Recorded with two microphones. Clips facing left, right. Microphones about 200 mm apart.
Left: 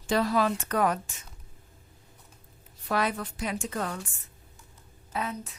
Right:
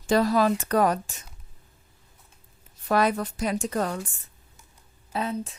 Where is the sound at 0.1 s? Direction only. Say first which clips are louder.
Right 4 dB; 40° right (ahead or behind).